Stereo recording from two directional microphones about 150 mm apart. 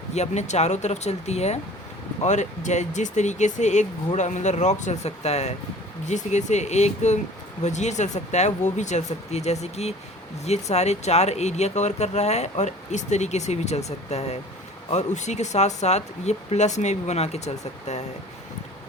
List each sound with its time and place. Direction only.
0.1 s speech: 50° left (ahead or behind)